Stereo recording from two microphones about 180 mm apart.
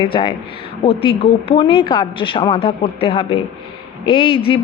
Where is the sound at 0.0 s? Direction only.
30° left (ahead or behind).